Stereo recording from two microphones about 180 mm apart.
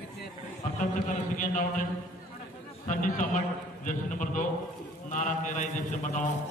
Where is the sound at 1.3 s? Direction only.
45° left (ahead or behind).